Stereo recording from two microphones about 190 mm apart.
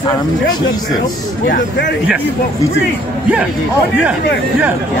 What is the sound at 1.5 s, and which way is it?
Speech, 65° left (ahead or behind).